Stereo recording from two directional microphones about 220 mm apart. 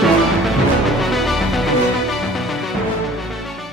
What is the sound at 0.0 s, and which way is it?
Music, centre (ahead or behind).